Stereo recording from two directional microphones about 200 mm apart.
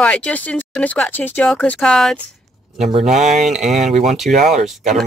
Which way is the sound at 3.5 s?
Centre (ahead or behind).